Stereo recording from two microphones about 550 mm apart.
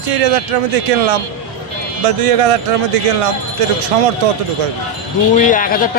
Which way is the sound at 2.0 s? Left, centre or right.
Right.